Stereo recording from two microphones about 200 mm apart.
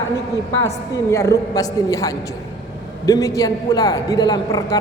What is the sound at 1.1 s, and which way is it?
A woman's voice, 15° left (ahead or behind).